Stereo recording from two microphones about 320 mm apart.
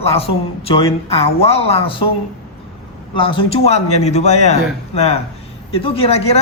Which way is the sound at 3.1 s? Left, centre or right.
Centre.